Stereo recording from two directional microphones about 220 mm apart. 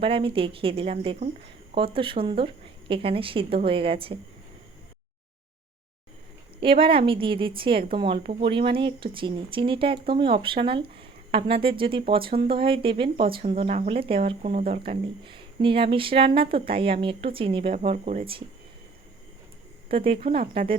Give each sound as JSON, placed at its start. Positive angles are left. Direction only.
{"t": 0.0, "sound": "a woman's voice", "side_deg": -25}
{"t": 6.6, "sound": "a woman's voice", "side_deg": -25}
{"t": 20.1, "sound": "a woman's voice", "side_deg": -25}